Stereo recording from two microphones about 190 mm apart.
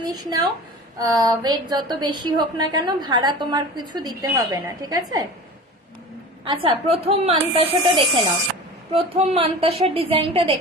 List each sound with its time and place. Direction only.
0.0 s a woman's voice: 20° right (ahead or behind)
6.4 s a woman's voice: 30° right (ahead or behind)